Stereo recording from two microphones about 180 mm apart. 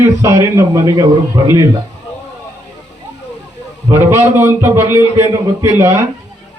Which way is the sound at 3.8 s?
15° right (ahead or behind).